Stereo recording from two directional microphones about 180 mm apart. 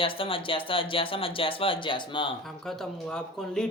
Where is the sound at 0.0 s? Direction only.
30° left (ahead or behind).